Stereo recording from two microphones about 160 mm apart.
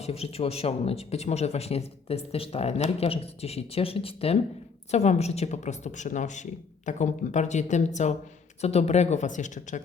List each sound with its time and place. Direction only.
0.0 s a woman's voice: 40° left (ahead or behind)